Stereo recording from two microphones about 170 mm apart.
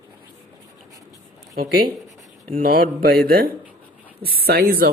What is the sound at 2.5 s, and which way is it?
Speech, 55° right (ahead or behind).